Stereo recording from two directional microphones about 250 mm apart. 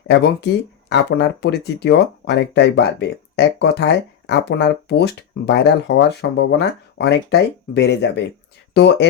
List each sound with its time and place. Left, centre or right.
0.1 s speech: left